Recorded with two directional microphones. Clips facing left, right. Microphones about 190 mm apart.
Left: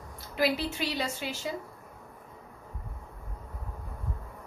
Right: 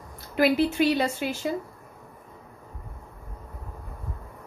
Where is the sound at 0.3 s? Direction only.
55° right (ahead or behind).